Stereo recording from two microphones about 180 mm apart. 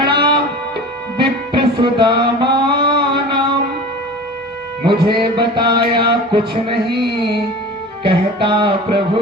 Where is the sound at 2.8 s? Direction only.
25° right (ahead or behind).